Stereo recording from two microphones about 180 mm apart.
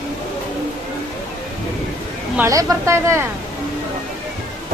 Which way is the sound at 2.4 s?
20° right (ahead or behind).